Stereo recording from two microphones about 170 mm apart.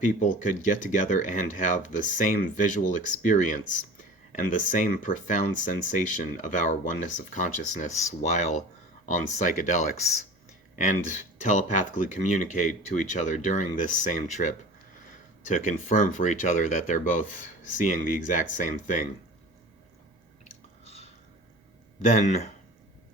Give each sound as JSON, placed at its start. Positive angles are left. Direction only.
{"t": 0.2, "sound": "speech", "side_deg": 45}